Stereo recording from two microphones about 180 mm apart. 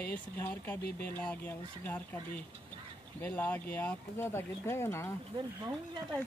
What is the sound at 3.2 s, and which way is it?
Speech, 10° left (ahead or behind).